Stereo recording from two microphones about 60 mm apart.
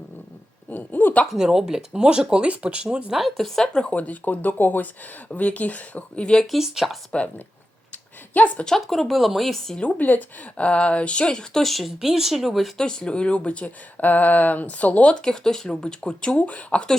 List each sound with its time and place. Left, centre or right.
0.7 s a sound: left
1.4 s speech: centre
3.2 s speech: centre
3.7 s speech: centre
6.5 s speech: centre
7.1 s a woman's voice: left
8.6 s speech: centre
10.0 s speech: left; by 12.8 s centre
12.8 s speech: centre